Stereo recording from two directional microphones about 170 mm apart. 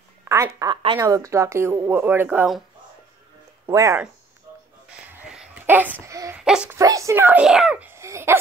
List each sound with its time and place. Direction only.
0.2 s speech: 15° right (ahead or behind)
3.6 s speech: 20° right (ahead or behind)
4.9 s a sound: 5° right (ahead or behind)
6.4 s a child's voice: 5° right (ahead or behind)
6.8 s speech: 20° right (ahead or behind)